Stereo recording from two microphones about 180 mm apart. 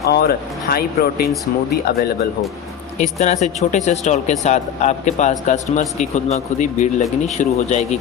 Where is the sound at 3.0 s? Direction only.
40° left (ahead or behind).